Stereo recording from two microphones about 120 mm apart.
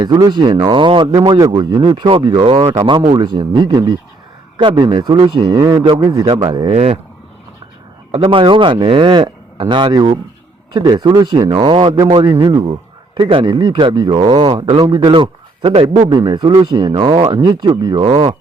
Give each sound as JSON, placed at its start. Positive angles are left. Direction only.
{"t": 0.0, "sound": "a man's voice", "side_deg": -35}
{"t": 1.4, "sound": "a man's voice", "side_deg": -35}
{"t": 6.7, "sound": "speech", "side_deg": -60}
{"t": 8.2, "sound": "a man's voice", "side_deg": -45}
{"t": 16.0, "sound": "a man's voice", "side_deg": -40}